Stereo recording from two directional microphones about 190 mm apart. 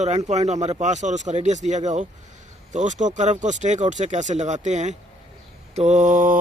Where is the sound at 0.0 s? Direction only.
35° right (ahead or behind).